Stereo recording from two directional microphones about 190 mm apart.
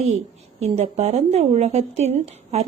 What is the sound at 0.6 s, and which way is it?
Speech, 35° right (ahead or behind).